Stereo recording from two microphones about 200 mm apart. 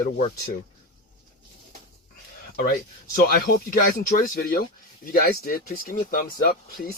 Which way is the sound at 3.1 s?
50° left (ahead or behind).